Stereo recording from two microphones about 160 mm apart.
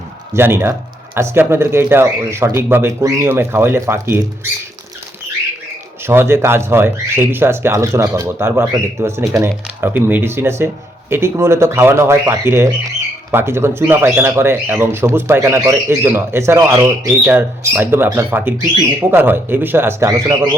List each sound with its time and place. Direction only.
0.3 s speech: 15° right (ahead or behind)
6.1 s speech: 15° right (ahead or behind)